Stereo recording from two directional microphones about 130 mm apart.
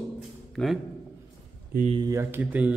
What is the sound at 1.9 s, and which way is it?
Speech, 25° right (ahead or behind).